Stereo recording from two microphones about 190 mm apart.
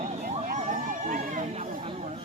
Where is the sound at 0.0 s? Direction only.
35° right (ahead or behind).